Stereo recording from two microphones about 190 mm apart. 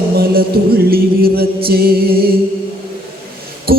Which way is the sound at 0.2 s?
55° right (ahead or behind).